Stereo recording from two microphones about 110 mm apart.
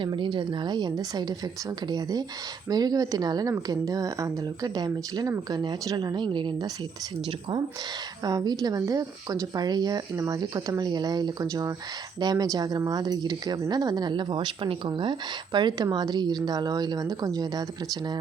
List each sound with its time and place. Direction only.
0.0 s a woman's voice: 45° right (ahead or behind)
8.2 s speech: 35° right (ahead or behind)